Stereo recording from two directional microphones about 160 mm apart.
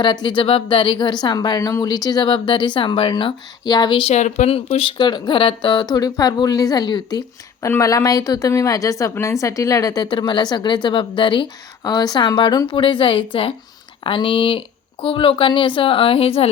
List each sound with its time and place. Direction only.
0.0 s a woman's voice: 30° left (ahead or behind)